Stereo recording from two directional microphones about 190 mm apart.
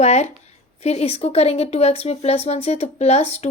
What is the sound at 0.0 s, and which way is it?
A woman's voice, 35° left (ahead or behind).